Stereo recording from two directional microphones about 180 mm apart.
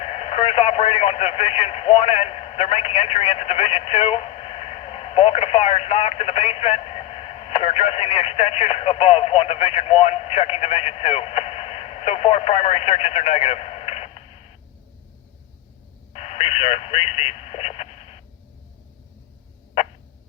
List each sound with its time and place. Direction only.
0.0 s speech: 35° left (ahead or behind)
16.1 s speech: 35° left (ahead or behind)